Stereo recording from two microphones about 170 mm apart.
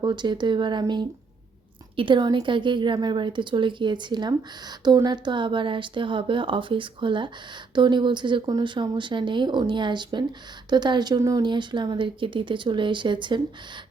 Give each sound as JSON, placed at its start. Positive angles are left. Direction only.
{"t": 0.0, "sound": "a woman's voice", "side_deg": -25}